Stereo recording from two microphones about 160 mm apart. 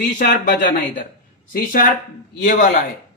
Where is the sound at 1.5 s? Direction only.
60° left (ahead or behind).